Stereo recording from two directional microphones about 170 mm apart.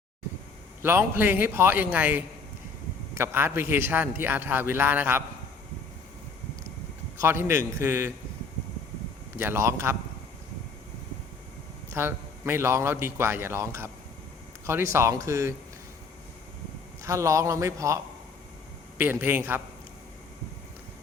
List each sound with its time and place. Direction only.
0.8 s a man's voice: 10° right (ahead or behind)
7.2 s a man's voice: 15° right (ahead or behind)
9.3 s a man's voice: 15° right (ahead or behind)
11.9 s a man's voice: 15° right (ahead or behind)
17.0 s a man's voice: 15° right (ahead or behind)